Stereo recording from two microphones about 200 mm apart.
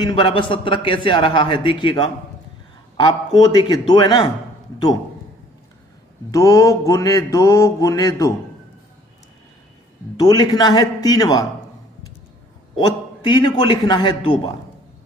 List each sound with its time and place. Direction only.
0.0 s a man's voice: 25° left (ahead or behind)
6.3 s mantra: 15° left (ahead or behind)
10.1 s a man's voice: 20° left (ahead or behind)
12.7 s a man's voice: 20° left (ahead or behind)